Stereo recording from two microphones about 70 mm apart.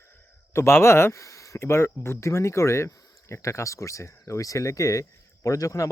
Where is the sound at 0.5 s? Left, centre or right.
Left.